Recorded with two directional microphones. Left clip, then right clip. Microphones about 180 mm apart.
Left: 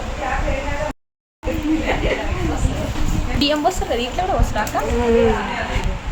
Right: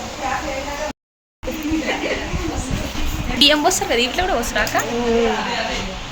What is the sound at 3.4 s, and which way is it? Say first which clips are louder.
Speech: right 4 dB; centre (ahead or behind).